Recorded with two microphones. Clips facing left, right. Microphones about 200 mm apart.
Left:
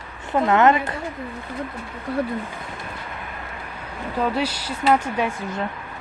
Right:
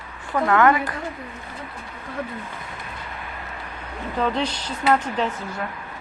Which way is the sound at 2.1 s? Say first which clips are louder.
Left 7 dB; 35° left (ahead or behind).